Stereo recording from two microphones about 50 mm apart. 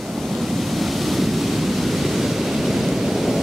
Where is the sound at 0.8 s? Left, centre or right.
Centre.